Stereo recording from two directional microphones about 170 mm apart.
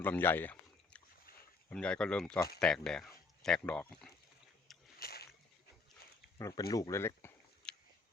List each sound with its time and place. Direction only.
0.0 s speech: 10° left (ahead or behind)
1.7 s speech: 5° left (ahead or behind)
4.9 s rowboat: 65° left (ahead or behind)
6.4 s speech: 20° left (ahead or behind)